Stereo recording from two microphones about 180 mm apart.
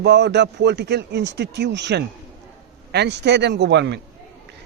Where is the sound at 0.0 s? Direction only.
70° right (ahead or behind).